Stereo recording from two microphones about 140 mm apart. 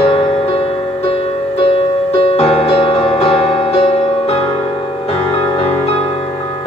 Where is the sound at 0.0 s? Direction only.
45° left (ahead or behind).